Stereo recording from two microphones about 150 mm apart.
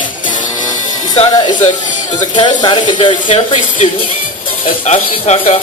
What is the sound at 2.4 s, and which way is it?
Speech, 30° left (ahead or behind).